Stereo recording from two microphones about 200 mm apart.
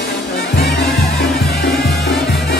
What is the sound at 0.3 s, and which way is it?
Music, 55° left (ahead or behind).